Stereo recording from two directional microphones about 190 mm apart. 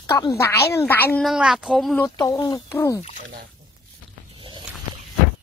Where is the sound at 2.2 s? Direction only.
20° left (ahead or behind).